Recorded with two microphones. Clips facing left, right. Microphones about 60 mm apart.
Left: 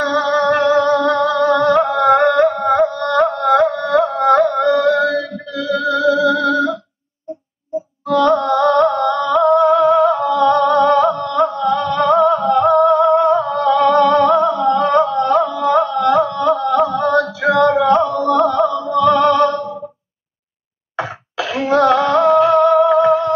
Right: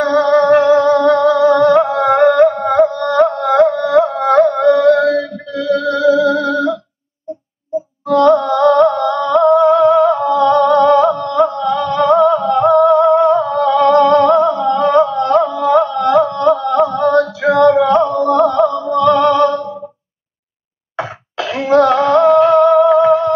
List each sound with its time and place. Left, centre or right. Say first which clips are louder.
0.0 s music: right 4 dB; centre
6.3 s a sound: even; left
8.1 s music: right 3 dB; centre
15.6 s carnatic music: right 2 dB; centre
16.6 s a sound: right 2 dB; centre
17.4 s music: right 3 dB; centre
21.0 s cough: right 1 dB; centre
21.5 s music: right 2 dB; centre